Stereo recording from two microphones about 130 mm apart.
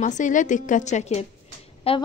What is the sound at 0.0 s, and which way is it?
A woman's voice, 75° left (ahead or behind).